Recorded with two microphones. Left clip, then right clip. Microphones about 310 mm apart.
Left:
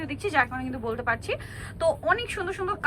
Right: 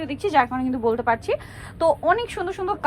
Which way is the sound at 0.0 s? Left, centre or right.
Centre.